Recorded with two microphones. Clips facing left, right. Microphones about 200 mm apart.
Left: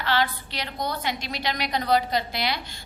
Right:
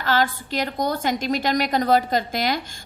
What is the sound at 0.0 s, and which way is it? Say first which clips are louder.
A woman's voice: right 3 dB; 45° right (ahead or behind).